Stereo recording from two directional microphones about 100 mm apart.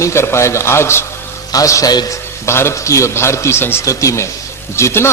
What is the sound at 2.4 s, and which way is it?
A man's voice, 25° left (ahead or behind).